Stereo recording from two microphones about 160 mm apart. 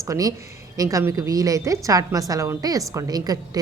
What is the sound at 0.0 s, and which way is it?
A woman's voice, 20° right (ahead or behind).